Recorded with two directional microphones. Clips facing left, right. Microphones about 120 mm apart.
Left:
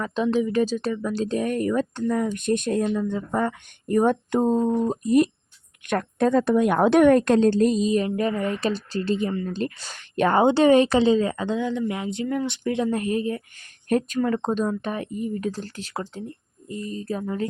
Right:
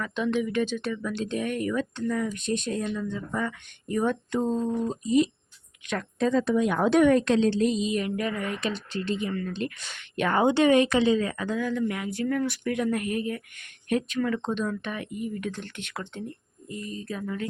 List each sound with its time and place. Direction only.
0.0 s speech: 35° left (ahead or behind)
2.3 s a woman's voice: 55° left (ahead or behind); by 17.5 s 30° left (ahead or behind)